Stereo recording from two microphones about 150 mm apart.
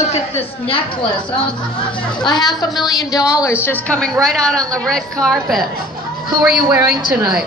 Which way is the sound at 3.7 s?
5° left (ahead or behind).